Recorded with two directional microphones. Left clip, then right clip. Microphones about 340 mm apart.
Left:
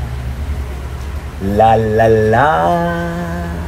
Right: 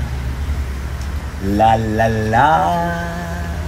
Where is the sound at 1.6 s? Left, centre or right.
Left.